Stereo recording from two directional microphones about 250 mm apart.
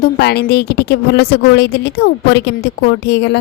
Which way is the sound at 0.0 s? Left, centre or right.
Left.